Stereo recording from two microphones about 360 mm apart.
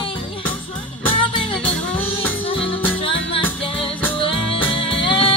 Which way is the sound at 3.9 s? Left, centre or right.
Centre.